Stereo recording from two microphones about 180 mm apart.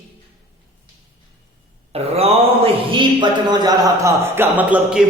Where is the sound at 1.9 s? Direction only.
35° right (ahead or behind).